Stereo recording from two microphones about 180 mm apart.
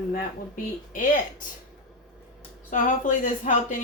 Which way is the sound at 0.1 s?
45° left (ahead or behind).